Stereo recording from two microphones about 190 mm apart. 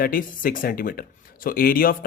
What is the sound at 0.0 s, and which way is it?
Speech, 50° left (ahead or behind).